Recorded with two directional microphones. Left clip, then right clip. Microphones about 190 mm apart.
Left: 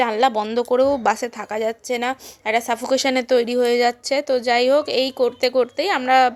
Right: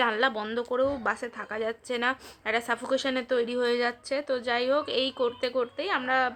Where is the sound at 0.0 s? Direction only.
25° left (ahead or behind).